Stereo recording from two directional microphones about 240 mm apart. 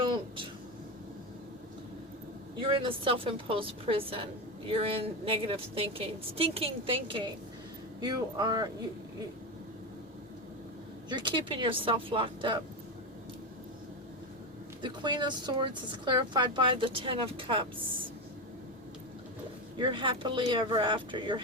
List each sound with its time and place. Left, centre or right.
0.0 s a sound: centre
2.6 s a woman's voice: right
11.1 s a woman's voice: centre
14.8 s a woman's voice: centre
19.8 s a woman's voice: right